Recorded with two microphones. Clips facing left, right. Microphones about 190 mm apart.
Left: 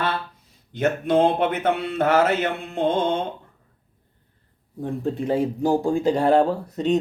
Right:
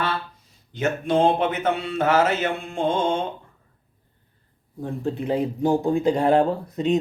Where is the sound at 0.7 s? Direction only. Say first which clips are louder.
Left 2 dB; 55° left (ahead or behind).